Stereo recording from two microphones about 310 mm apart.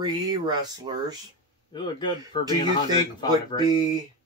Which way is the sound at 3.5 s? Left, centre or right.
Centre.